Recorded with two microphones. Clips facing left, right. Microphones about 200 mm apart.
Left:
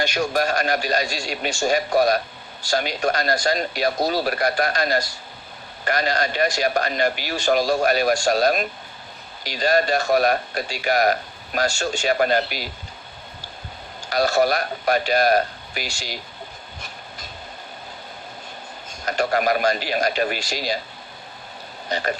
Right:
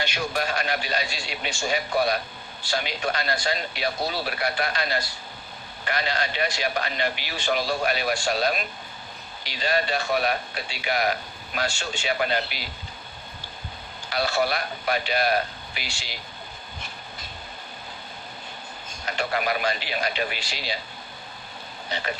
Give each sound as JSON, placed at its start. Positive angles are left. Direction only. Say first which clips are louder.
{"t": 0.0, "sound": "speech", "louder": "left 6 dB", "side_deg": 45}
{"t": 14.1, "sound": "speech", "louder": "left 6 dB", "side_deg": 45}
{"t": 19.0, "sound": "speech", "louder": "left 6 dB", "side_deg": 45}
{"t": 21.8, "sound": "speech", "louder": "left 6 dB", "side_deg": 45}